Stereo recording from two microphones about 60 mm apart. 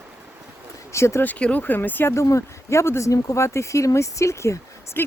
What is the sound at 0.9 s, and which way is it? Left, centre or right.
Speech, left.